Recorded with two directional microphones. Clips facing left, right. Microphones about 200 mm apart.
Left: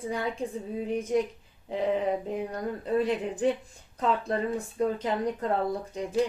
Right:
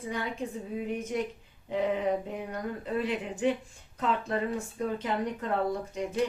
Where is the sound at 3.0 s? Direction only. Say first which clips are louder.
Left 1 dB; 35° left (ahead or behind).